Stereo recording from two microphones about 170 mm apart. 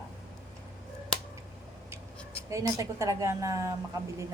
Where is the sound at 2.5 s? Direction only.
20° right (ahead or behind).